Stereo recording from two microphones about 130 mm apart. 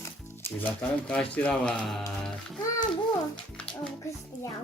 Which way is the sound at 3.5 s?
10° left (ahead or behind).